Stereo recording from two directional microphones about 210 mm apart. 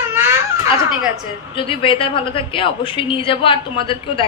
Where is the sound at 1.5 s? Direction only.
25° left (ahead or behind).